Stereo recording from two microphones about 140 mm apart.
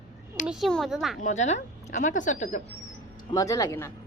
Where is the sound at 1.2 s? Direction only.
55° left (ahead or behind).